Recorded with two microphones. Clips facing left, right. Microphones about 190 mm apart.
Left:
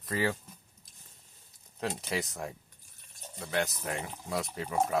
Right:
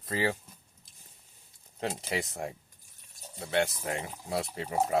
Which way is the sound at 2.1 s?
25° right (ahead or behind).